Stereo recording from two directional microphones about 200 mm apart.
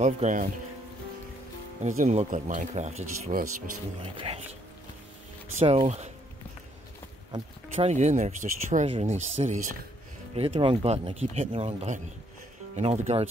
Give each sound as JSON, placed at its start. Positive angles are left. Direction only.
{"t": 0.0, "sound": "speech", "side_deg": -40}
{"t": 1.8, "sound": "speech", "side_deg": -35}
{"t": 5.6, "sound": "speech", "side_deg": -30}
{"t": 7.7, "sound": "speech", "side_deg": -35}